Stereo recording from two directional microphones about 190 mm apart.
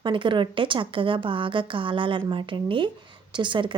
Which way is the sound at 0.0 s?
25° right (ahead or behind).